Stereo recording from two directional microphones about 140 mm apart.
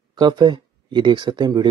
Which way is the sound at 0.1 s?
35° right (ahead or behind).